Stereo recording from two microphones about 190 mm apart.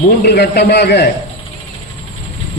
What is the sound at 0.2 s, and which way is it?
Speech, 60° left (ahead or behind).